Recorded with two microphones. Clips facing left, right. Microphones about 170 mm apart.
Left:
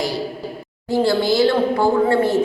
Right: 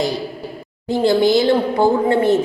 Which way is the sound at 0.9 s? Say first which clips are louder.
Right 3 dB; 20° right (ahead or behind).